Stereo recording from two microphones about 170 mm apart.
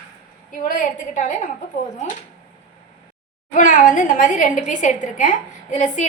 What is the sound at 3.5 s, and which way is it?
A woman's voice, 50° left (ahead or behind).